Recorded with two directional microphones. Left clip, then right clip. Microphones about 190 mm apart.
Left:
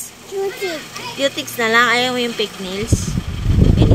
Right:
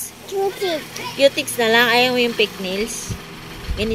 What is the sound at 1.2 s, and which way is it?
Speech, 25° left (ahead or behind).